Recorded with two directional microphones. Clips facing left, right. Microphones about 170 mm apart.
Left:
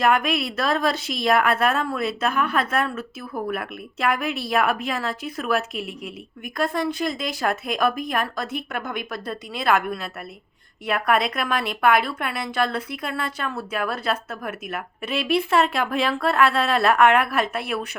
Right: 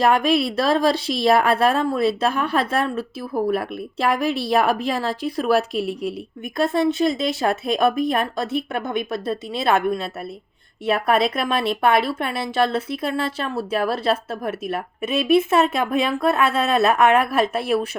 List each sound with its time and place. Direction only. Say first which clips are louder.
0.0 s a woman's voice: right 3 dB; 30° right (ahead or behind)